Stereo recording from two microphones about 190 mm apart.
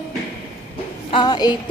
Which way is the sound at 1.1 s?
20° left (ahead or behind).